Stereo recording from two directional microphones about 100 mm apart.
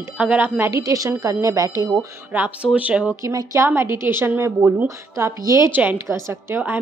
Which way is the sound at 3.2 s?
30° right (ahead or behind).